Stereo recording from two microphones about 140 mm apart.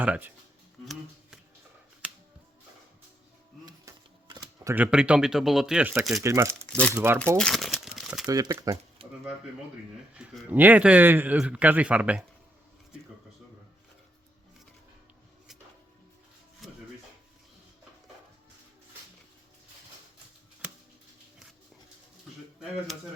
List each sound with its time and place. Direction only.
0.0 s a man's voice: 10° right (ahead or behind)
3.8 s a sound: 25° right (ahead or behind)
4.7 s a man's voice: 10° right (ahead or behind)
6.7 s speech: 10° left (ahead or behind)
6.9 s a man's voice: 15° right (ahead or behind)
7.3 s speech: 5° left (ahead or behind)
7.9 s crumpling: 5° right (ahead or behind)
8.3 s speech: 25° right (ahead or behind)
9.0 s a sound: 45° right (ahead or behind)
10.2 s a man's voice: 10° right (ahead or behind)
16.6 s rub: centre (ahead or behind)